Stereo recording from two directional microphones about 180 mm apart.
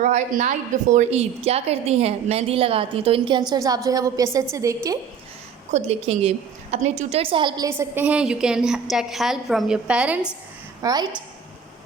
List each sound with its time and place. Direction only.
0.0 s a woman's voice: 45° right (ahead or behind); by 4.9 s 15° right (ahead or behind)
5.7 s a woman's voice: 35° right (ahead or behind); by 10.3 s 5° right (ahead or behind)
10.8 s a woman's voice: 20° right (ahead or behind)